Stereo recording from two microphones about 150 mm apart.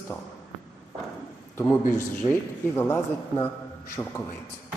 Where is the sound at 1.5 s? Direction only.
15° left (ahead or behind).